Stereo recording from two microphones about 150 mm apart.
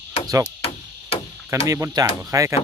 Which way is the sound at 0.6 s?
40° left (ahead or behind).